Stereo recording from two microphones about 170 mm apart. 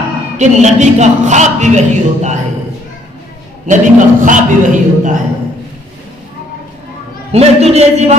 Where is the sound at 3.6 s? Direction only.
50° right (ahead or behind).